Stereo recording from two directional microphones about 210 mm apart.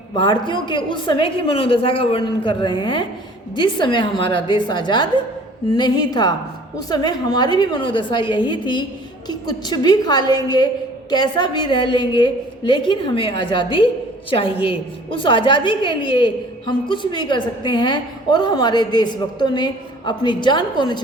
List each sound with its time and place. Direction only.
0.2 s a woman's voice: 20° left (ahead or behind)